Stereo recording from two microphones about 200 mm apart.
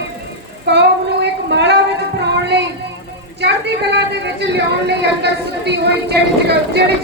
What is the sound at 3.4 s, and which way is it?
A woman's voice, 60° right (ahead or behind).